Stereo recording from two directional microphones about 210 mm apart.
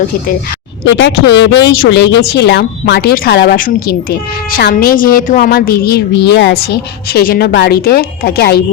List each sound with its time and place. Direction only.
0.9 s speech: 55° left (ahead or behind)